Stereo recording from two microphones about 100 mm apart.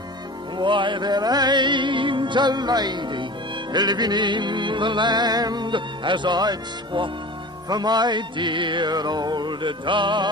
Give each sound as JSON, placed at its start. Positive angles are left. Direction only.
{"t": 0.6, "sound": "music", "side_deg": -50}